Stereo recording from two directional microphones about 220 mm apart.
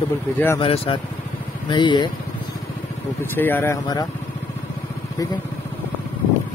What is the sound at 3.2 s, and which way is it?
Speech, 10° left (ahead or behind).